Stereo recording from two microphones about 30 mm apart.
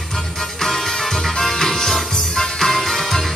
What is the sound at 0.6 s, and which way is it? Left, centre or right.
Music, centre.